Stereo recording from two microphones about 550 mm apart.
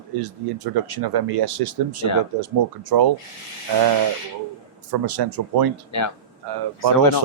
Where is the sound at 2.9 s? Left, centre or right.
Right.